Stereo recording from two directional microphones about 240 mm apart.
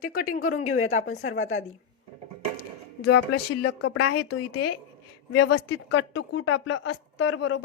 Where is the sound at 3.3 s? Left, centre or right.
Left.